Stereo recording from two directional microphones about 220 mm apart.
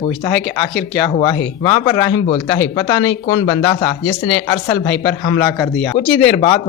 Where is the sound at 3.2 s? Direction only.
20° left (ahead or behind).